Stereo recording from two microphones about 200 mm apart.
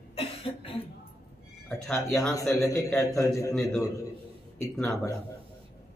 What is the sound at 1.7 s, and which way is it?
Speech, 5° left (ahead or behind).